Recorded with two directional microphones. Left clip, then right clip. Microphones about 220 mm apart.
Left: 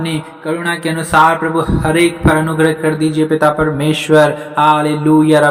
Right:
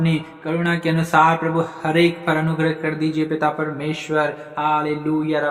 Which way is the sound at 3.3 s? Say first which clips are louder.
Left 9 dB; 30° left (ahead or behind).